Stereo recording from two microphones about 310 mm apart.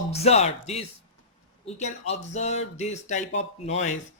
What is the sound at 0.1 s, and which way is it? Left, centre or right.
Speech, centre.